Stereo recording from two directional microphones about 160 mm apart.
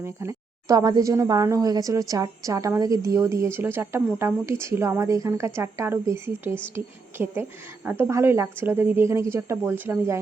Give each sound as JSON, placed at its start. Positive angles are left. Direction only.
{"t": 0.0, "sound": "a woman's voice", "side_deg": -15}